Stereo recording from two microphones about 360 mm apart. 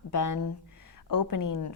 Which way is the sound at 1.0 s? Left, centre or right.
Left.